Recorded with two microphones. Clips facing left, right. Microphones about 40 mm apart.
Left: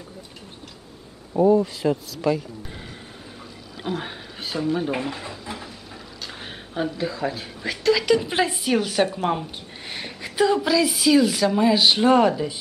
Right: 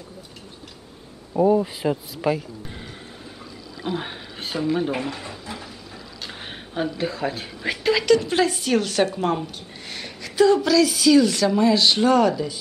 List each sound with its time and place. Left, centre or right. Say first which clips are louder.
1.3 s speech: left 1 dB; centre
4.0 s speech: right 1 dB; centre
4.9 s speech: even; centre
6.2 s a sound: right 1 dB; centre
7.0 s speech: right 1 dB; centre
7.6 s speech: left 1 dB; centre
8.0 s a woman's voice: right 2 dB; centre
9.8 s a woman's voice: left 2 dB; left